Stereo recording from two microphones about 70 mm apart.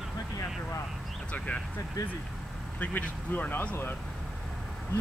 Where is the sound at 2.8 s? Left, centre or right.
Left.